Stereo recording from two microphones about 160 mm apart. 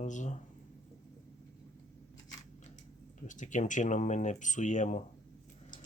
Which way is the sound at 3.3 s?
50° left (ahead or behind).